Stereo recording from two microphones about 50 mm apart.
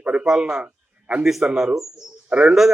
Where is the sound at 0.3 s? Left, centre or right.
Centre.